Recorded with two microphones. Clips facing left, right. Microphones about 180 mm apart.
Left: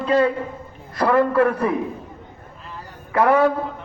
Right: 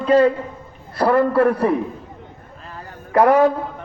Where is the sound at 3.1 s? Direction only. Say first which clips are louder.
Right 3 dB; 40° right (ahead or behind).